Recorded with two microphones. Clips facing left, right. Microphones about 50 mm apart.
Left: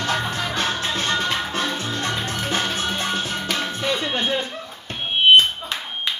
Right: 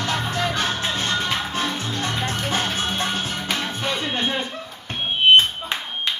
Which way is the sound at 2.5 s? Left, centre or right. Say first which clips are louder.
Left 2 dB; right.